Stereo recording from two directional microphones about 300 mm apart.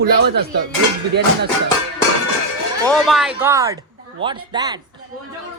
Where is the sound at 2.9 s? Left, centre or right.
Centre.